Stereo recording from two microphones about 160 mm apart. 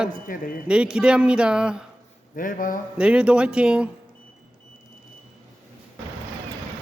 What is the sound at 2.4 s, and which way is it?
Speech, 55° left (ahead or behind).